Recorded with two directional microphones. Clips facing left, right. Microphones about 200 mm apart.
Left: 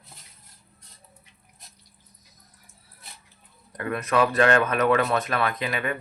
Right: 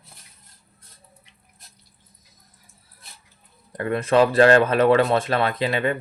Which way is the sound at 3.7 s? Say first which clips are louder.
Right 5 dB; 30° right (ahead or behind).